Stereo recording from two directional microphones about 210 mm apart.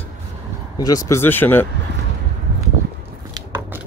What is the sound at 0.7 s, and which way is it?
Speech, 15° left (ahead or behind).